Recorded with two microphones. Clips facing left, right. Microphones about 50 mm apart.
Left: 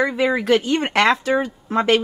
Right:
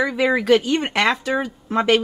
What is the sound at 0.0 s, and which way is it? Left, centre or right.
Speech, centre.